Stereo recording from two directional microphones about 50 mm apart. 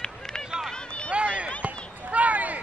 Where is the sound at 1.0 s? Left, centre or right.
Right.